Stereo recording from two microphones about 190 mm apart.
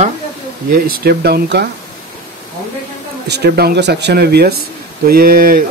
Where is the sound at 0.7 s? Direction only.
50° right (ahead or behind).